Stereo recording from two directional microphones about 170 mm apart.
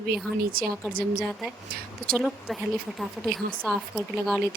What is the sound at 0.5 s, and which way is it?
Speech, 60° right (ahead or behind).